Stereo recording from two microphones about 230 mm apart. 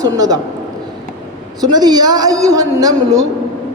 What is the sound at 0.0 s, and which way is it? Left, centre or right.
Speech, centre.